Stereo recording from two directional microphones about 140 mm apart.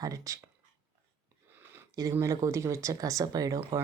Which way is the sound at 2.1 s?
20° right (ahead or behind).